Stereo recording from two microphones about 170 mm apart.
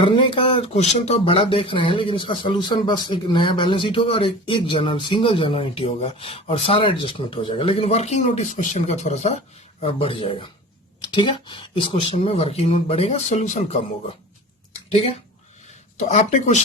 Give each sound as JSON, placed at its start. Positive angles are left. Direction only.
{"t": 0.0, "sound": "speech", "side_deg": 30}
{"t": 16.0, "sound": "speech", "side_deg": 45}